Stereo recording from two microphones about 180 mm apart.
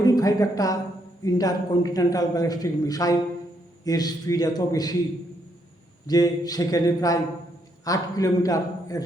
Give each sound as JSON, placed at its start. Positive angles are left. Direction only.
{"t": 0.0, "sound": "a man's voice", "side_deg": 20}
{"t": 6.1, "sound": "a man's voice", "side_deg": 20}